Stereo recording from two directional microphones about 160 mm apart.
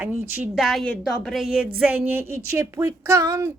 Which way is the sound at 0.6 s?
Centre (ahead or behind).